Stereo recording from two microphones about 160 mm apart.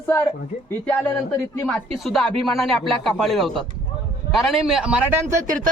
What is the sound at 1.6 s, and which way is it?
Speech, 10° left (ahead or behind).